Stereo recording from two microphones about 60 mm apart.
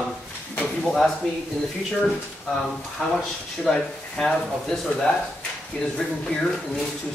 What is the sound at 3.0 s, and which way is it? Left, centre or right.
Speech, centre.